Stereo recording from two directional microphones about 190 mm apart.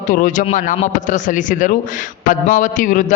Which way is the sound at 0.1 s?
45° left (ahead or behind).